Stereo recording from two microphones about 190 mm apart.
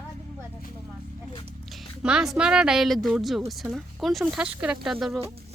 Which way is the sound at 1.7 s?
5° right (ahead or behind).